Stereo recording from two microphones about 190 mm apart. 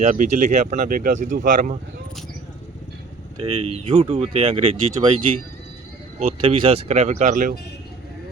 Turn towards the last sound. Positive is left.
turn(degrees=-45)  # may be behind; listen again after turning